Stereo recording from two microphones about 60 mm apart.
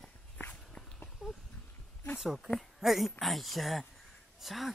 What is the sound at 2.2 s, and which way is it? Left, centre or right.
Speech, centre.